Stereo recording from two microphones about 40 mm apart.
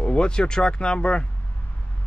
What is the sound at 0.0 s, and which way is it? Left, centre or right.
Speech, left.